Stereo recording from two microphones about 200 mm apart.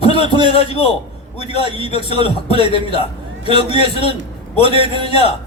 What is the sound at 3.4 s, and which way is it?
Speech, 25° right (ahead or behind).